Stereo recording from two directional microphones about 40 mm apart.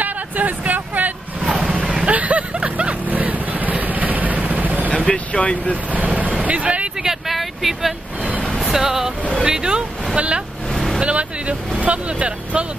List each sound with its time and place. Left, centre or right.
0.0 s a sound: right
1.8 s vehicle: centre
2.0 s a sound: right
3.1 s vehicle: right
4.9 s speech: left
5.9 s vehicle: right
6.4 s speech: right
7.0 s speech: centre
7.3 s vehicle: centre
8.7 s speech: centre; by 10.4 s right
10.7 s vehicle: centre
11.0 s speech: right